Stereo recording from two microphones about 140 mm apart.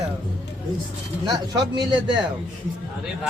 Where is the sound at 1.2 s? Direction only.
25° right (ahead or behind).